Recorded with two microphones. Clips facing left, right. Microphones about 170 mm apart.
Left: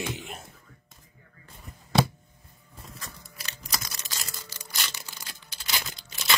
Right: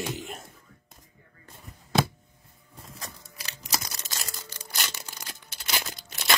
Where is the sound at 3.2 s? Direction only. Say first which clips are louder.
Even; 20° right (ahead or behind).